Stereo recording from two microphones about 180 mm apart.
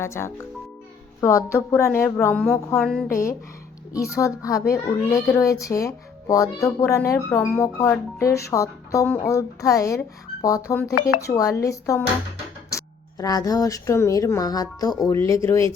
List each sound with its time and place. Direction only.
0.0 s a child's voice: 15° left (ahead or behind)
3.1 s a child's voice: 15° left (ahead or behind)